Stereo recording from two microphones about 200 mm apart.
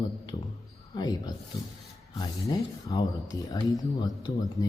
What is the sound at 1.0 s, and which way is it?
Speech, 20° left (ahead or behind).